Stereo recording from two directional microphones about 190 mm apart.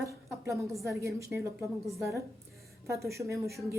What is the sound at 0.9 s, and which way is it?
Speech, 15° right (ahead or behind).